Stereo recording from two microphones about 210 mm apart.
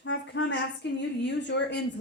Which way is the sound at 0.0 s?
60° left (ahead or behind).